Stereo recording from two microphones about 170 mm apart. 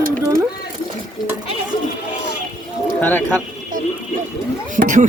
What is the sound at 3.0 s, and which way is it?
Speech, 10° left (ahead or behind).